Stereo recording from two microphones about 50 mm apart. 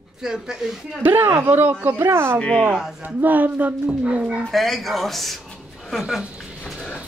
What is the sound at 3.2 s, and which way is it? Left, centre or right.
Speech, right.